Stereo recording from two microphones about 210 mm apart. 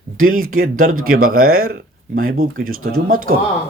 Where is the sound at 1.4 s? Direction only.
90° right.